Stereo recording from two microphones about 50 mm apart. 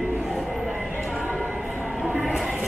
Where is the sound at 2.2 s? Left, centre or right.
Centre.